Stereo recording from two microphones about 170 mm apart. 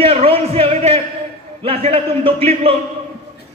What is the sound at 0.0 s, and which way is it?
A man's voice, 35° right (ahead or behind).